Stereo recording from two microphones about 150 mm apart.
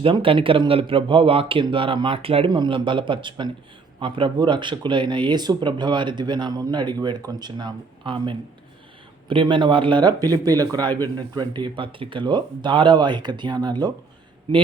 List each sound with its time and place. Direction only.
0.0 s speech: 35° right (ahead or behind)